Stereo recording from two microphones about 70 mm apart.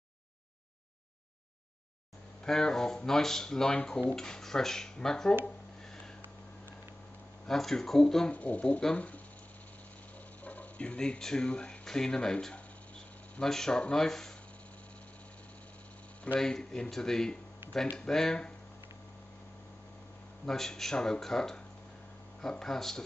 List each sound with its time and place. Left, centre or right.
2.4 s speech: centre
7.4 s speech: centre
8.3 s speech: centre
10.4 s speech: left
16.3 s speech: centre
20.4 s speech: centre